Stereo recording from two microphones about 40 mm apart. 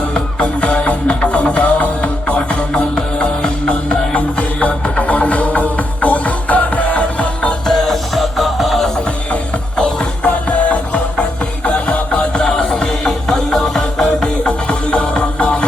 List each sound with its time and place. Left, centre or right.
0.1 s music: left
2.9 s music: centre
3.7 s music: left
7.7 s music: centre
8.1 s music: centre
9.3 s music: left
12.4 s music: centre
14.4 s music: left